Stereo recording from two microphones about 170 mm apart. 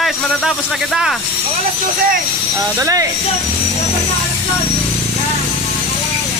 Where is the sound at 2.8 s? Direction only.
20° right (ahead or behind).